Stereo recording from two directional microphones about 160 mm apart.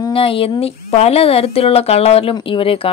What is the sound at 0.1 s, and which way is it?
Speech, 35° left (ahead or behind).